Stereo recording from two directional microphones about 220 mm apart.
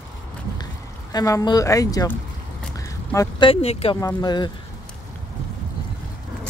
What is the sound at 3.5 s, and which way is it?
Speech, 25° left (ahead or behind).